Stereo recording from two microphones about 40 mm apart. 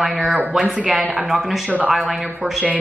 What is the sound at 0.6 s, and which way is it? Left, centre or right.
Speech, right.